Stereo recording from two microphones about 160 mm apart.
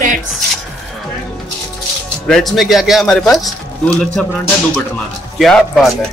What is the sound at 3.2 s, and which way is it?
Speech, 20° left (ahead or behind).